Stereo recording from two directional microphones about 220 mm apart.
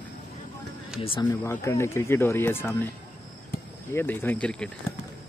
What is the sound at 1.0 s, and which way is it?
Speech, 25° left (ahead or behind).